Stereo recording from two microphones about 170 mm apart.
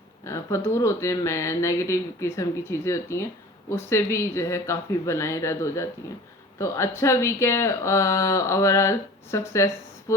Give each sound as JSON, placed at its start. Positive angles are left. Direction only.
{"t": 0.3, "sound": "speech", "side_deg": 15}